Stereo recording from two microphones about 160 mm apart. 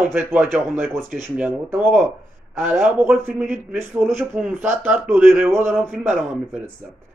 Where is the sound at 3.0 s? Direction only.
15° right (ahead or behind).